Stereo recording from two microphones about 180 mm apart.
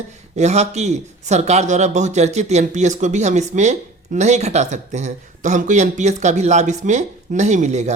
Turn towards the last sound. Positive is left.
turn(degrees=-40)  # may be behind; listen again after turning